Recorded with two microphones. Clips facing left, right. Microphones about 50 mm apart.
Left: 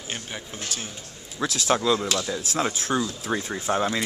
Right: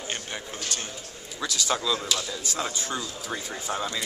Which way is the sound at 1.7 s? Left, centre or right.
Left.